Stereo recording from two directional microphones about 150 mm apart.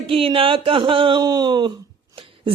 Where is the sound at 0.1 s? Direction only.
40° right (ahead or behind).